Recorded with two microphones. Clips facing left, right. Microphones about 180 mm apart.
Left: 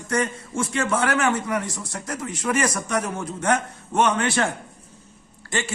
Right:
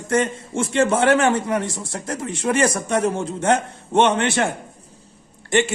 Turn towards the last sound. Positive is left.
turn(degrees=-25)  # may be behind; listen again after turning